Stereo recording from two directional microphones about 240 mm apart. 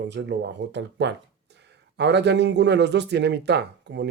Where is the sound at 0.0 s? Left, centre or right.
Right.